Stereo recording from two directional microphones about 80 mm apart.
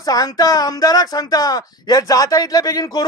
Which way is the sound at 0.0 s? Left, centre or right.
Left.